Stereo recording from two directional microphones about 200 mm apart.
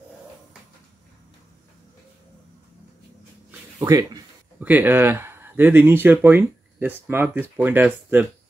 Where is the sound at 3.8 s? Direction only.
15° right (ahead or behind).